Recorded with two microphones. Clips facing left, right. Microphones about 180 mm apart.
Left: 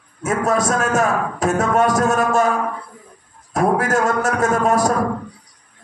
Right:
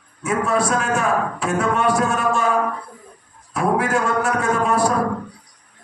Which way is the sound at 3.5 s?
45° left (ahead or behind).